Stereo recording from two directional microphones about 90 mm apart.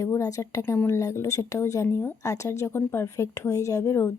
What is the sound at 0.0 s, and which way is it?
Speech, 35° left (ahead or behind).